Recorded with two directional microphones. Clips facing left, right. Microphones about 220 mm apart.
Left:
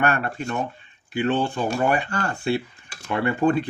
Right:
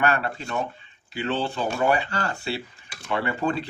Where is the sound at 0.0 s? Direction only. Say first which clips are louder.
Left 1 dB; 50° left (ahead or behind).